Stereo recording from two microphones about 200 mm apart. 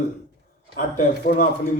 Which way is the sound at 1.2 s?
45° left (ahead or behind).